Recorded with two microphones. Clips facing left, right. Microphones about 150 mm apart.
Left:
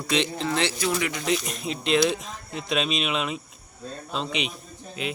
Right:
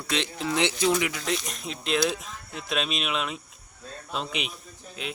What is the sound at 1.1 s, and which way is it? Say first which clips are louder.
Speech: left 4 dB; centre (ahead or behind).